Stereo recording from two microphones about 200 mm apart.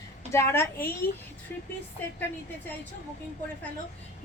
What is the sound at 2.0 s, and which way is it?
Speech, 10° left (ahead or behind).